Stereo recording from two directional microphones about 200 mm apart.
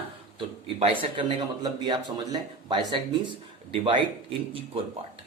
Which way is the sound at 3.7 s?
25° right (ahead or behind).